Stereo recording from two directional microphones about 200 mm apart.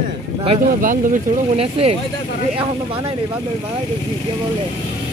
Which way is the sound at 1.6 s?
30° right (ahead or behind).